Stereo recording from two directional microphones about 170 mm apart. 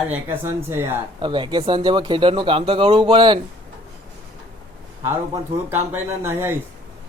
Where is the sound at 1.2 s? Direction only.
25° right (ahead or behind).